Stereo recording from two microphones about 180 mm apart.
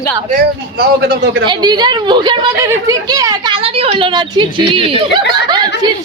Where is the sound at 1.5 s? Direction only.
25° right (ahead or behind).